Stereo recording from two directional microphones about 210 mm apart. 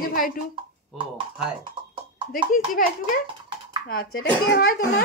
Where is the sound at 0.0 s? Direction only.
45° left (ahead or behind).